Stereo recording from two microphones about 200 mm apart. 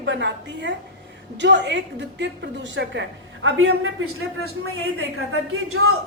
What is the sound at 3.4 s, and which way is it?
A man's voice, 80° right.